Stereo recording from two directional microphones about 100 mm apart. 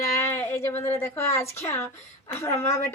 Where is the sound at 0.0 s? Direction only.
30° left (ahead or behind).